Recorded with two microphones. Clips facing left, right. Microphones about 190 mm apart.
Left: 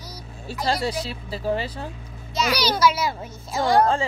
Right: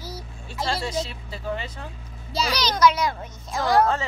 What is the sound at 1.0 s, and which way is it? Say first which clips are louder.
Speech: left 5 dB; 35° left (ahead or behind).